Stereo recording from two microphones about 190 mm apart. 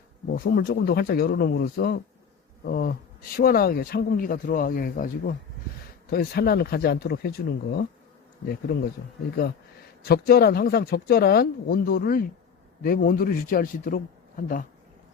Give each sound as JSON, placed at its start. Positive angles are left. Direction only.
{"t": 0.3, "sound": "speech", "side_deg": 50}
{"t": 10.1, "sound": "speech", "side_deg": 55}